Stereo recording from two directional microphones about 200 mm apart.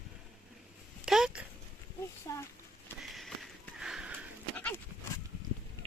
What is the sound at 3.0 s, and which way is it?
Sniff, centre (ahead or behind).